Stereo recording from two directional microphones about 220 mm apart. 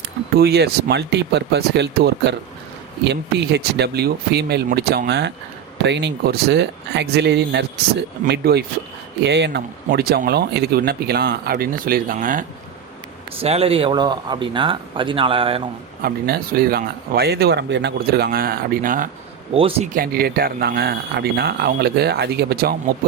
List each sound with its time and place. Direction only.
0.3 s speech: 45° right (ahead or behind)
13.4 s speech: 25° right (ahead or behind)
16.0 s speech: 45° right (ahead or behind)
19.5 s speech: 25° right (ahead or behind)
19.9 s speech: 45° right (ahead or behind)